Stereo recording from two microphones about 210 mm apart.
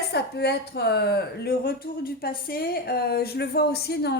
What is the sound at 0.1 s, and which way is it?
A woman's voice, 50° left (ahead or behind).